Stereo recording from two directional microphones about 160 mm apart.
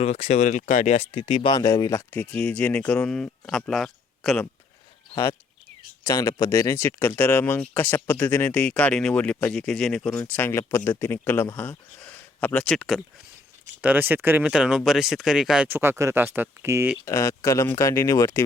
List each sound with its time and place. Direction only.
0.0 s speech: 40° left (ahead or behind); by 4.4 s centre (ahead or behind)
6.1 s speech: 20° left (ahead or behind); by 13.0 s 5° left (ahead or behind)
13.8 s speech: 10° right (ahead or behind)
17.1 s speech: 20° left (ahead or behind)